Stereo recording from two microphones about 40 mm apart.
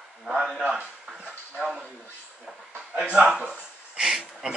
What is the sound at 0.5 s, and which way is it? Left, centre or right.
Speech, centre.